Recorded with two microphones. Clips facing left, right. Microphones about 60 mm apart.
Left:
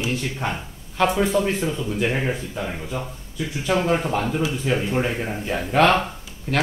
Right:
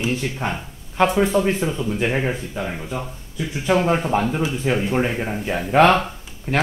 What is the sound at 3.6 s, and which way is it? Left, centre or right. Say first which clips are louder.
Speech: right 2 dB; right.